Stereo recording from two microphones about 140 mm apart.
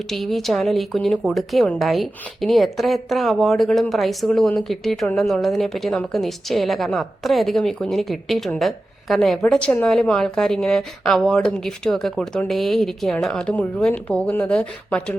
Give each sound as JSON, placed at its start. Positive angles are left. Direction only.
{"t": 0.1, "sound": "a woman's voice", "side_deg": 0}